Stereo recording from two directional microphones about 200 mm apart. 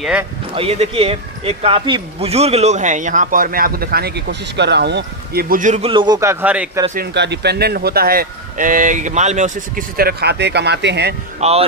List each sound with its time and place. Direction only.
0.6 s speech: 30° right (ahead or behind)
5.9 s a man's voice: 20° right (ahead or behind)
6.4 s speech: 5° right (ahead or behind)
7.0 s speech: 55° right (ahead or behind)
11.4 s speech: 35° right (ahead or behind)